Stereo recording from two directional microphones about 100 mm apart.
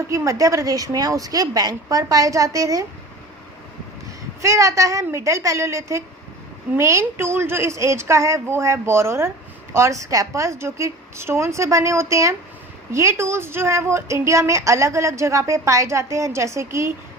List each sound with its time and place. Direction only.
0.1 s a woman's voice: 35° right (ahead or behind)
4.4 s a woman's voice: 30° right (ahead or behind)